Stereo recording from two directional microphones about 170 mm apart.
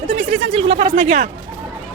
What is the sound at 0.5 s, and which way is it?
Speech, 35° right (ahead or behind).